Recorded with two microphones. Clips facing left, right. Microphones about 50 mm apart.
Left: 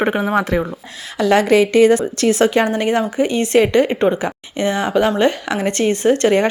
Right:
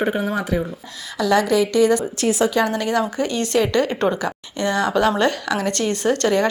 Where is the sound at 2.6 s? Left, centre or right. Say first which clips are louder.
Left 3 dB; left.